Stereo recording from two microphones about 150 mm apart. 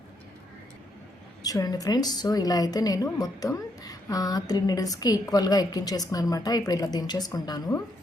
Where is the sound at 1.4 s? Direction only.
25° left (ahead or behind).